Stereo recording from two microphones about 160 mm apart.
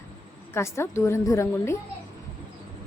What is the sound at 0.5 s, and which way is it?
A woman's voice, 15° left (ahead or behind).